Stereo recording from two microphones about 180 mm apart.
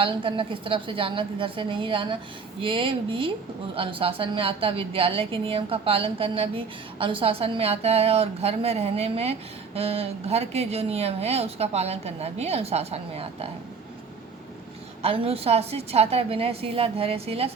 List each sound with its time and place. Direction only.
0.0 s a woman's voice: 30° right (ahead or behind)
15.0 s a woman's voice: 30° right (ahead or behind)